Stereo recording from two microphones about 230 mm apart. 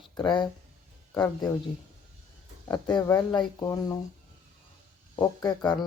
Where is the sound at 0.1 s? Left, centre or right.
Centre.